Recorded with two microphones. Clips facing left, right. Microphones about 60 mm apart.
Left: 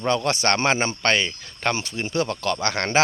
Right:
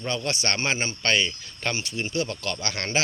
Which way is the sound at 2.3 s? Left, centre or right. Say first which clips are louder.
Left 6 dB; left.